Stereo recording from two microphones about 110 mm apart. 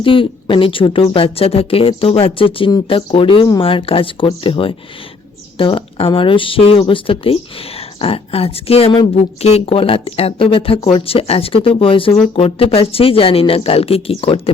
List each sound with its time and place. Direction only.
0.0 s speech: 55° left (ahead or behind)